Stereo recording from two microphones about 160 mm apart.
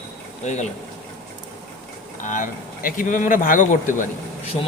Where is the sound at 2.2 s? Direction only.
55° left (ahead or behind).